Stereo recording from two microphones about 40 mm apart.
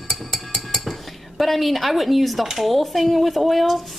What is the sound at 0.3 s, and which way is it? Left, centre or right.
Music, centre.